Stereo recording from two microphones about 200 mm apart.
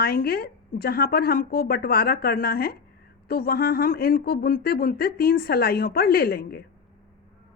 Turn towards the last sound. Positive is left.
turn(degrees=50)  # may be behind; listen again after turning